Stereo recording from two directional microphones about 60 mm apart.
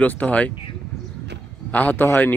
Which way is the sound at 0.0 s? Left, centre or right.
Left.